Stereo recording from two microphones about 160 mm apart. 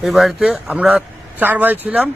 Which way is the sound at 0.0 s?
Centre (ahead or behind).